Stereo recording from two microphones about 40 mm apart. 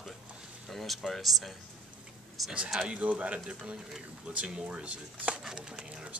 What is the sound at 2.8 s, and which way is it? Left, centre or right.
Speech, right.